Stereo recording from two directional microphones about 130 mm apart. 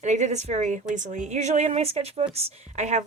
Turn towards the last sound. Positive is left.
turn(degrees=-65)  # may be behind; listen again after turning